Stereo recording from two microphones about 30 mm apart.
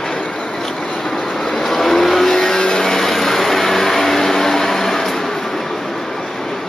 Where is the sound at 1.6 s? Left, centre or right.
Centre.